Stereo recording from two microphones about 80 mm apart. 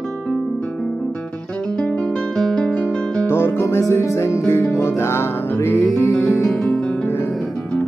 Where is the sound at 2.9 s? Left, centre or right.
Centre.